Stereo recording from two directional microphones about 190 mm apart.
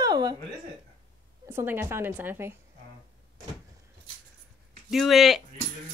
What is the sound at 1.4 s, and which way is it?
A woman's voice, 10° right (ahead or behind).